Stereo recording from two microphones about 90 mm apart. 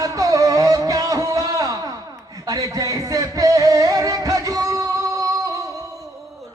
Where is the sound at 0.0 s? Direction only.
40° right (ahead or behind).